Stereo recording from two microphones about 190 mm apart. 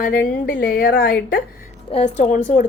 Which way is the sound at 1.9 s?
35° left (ahead or behind).